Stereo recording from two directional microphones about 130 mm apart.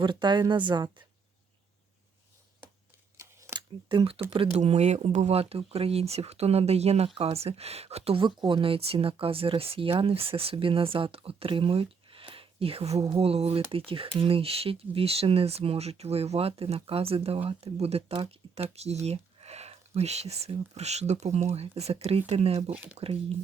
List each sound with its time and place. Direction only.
0.0 s a woman's voice: 35° right (ahead or behind)
3.2 s a sound: 20° right (ahead or behind)
3.8 s speech: 45° right (ahead or behind)
4.3 s speech: 55° right (ahead or behind)
22.7 s speech: 10° right (ahead or behind)
23.0 s speech: 50° right (ahead or behind)